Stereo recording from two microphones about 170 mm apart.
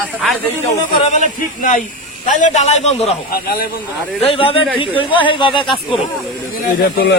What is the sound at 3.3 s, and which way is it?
Speech, 60° left (ahead or behind).